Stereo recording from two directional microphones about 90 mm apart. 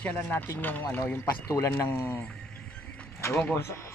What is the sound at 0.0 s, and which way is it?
Speech, 20° left (ahead or behind).